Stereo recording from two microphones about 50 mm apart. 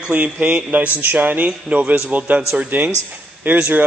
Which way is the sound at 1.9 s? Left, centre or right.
Right.